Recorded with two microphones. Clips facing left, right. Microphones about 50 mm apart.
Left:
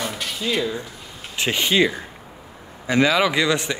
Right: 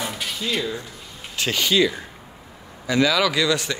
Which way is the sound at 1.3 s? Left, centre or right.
Left.